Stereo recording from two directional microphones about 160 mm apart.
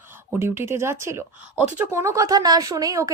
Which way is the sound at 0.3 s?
15° right (ahead or behind).